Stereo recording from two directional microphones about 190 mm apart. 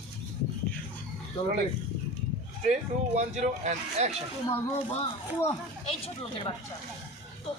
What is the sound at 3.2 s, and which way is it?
Speech, 35° right (ahead or behind).